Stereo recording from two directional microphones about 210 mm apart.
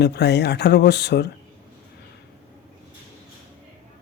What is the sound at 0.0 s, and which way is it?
Speech, 50° left (ahead or behind).